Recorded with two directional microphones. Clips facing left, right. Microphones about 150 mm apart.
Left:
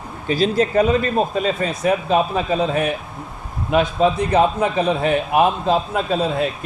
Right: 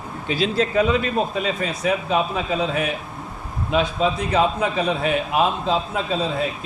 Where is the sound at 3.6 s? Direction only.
55° left (ahead or behind).